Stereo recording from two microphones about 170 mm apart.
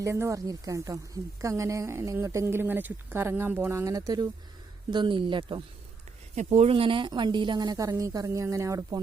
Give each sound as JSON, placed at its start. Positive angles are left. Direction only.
{"t": 0.0, "sound": "a woman's voice", "side_deg": -15}
{"t": 6.3, "sound": "a woman's voice", "side_deg": -45}